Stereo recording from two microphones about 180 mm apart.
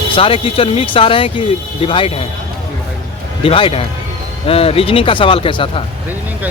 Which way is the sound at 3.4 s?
30° left (ahead or behind).